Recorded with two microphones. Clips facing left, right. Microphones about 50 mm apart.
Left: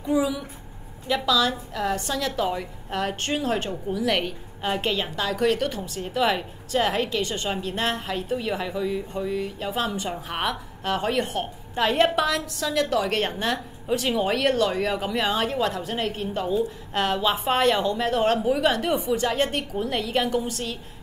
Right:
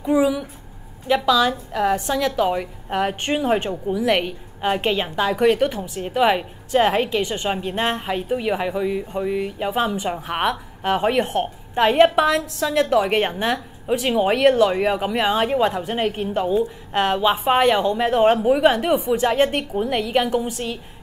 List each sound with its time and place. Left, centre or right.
0.0 s a woman's voice: centre